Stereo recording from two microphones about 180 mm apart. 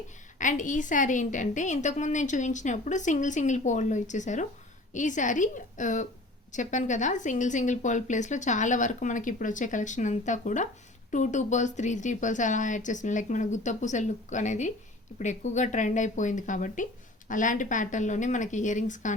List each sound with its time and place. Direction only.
0.3 s a woman's voice: 45° left (ahead or behind)